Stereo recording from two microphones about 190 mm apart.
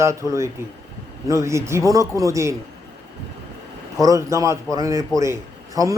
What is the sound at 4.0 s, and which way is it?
A man's voice, 15° right (ahead or behind).